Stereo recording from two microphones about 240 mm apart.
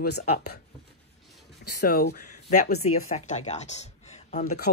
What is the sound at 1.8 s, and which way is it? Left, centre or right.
Speech, left.